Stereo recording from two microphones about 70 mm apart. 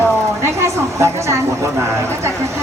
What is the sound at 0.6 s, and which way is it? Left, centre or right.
Speech, right.